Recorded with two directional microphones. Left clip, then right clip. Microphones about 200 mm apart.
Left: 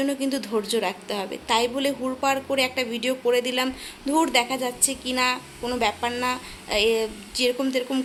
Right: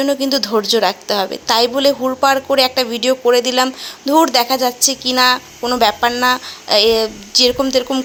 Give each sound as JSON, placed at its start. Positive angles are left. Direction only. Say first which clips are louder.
{"t": 0.0, "sound": "a woman's voice", "louder": "right 10 dB", "side_deg": -25}